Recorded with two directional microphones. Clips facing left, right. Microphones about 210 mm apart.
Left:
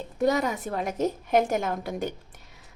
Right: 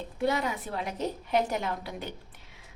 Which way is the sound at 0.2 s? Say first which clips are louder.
Left 5 dB; 45° left (ahead or behind).